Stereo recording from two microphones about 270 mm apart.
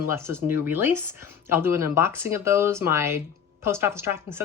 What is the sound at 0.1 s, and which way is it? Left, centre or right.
Speech, centre.